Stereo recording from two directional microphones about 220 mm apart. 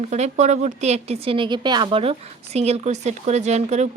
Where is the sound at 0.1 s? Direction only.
30° right (ahead or behind).